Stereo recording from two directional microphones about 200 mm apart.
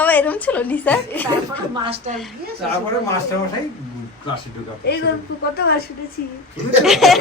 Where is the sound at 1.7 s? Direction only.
25° right (ahead or behind).